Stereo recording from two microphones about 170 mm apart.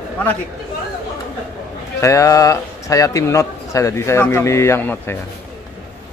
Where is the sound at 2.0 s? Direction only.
20° left (ahead or behind).